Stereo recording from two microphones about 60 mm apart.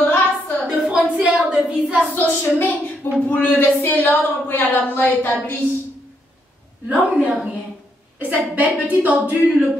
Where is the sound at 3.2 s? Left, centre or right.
Left.